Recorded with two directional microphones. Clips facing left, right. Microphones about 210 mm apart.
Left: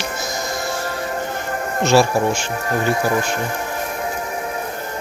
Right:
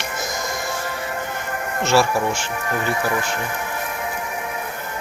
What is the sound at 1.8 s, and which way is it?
Speech, 15° left (ahead or behind).